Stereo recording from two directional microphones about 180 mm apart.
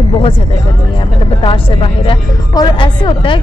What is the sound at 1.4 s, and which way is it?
A woman's voice, 30° left (ahead or behind).